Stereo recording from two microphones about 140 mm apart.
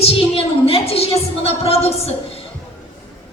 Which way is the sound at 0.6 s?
45° left (ahead or behind).